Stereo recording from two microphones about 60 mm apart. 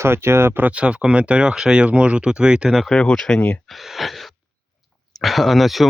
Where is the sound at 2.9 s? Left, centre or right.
Centre.